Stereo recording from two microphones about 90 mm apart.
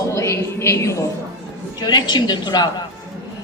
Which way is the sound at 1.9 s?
55° left (ahead or behind).